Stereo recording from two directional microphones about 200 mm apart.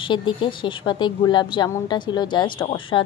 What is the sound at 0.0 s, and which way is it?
Speech, 25° left (ahead or behind).